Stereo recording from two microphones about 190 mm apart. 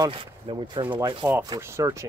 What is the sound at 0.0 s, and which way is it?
Speech, 25° right (ahead or behind).